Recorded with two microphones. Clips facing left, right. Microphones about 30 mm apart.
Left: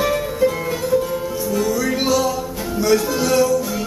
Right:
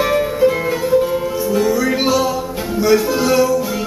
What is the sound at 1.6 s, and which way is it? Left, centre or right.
Music, centre.